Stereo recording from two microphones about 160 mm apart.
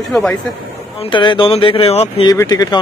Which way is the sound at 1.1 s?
30° left (ahead or behind).